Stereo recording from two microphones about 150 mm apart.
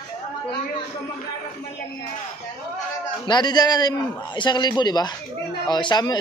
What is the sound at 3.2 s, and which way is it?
A man's voice, 30° left (ahead or behind).